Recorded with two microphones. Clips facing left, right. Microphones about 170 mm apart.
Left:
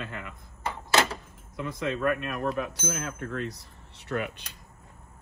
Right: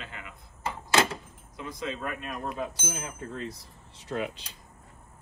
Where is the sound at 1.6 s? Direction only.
60° left (ahead or behind).